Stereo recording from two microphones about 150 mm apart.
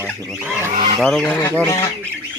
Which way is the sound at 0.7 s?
30° right (ahead or behind).